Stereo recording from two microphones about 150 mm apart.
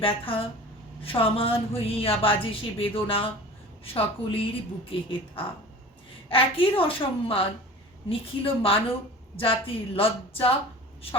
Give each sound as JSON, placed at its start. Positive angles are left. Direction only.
{"t": 0.3, "sound": "a woman's voice", "side_deg": 35}